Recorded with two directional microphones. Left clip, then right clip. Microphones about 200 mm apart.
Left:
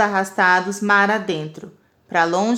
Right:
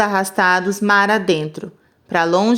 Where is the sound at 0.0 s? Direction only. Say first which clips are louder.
Right 1 dB; 30° right (ahead or behind).